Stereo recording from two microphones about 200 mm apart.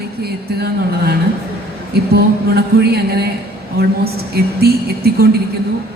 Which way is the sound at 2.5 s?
55° right (ahead or behind).